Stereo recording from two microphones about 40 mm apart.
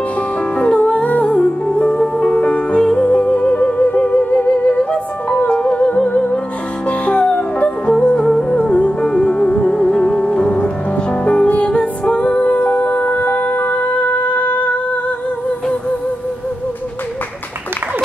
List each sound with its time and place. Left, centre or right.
0.6 s music: left
1.3 s music: left
7.9 s music: left
8.5 s music: left